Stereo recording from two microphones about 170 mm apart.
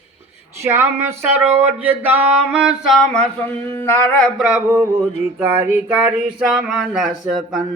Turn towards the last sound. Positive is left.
turn(degrees=0)  # may be behind; listen again after turning